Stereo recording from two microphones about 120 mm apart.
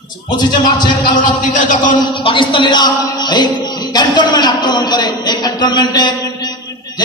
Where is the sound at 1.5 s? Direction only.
90° left.